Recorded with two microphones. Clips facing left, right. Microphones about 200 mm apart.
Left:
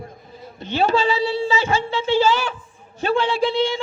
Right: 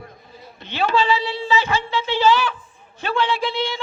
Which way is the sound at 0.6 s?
45° left (ahead or behind).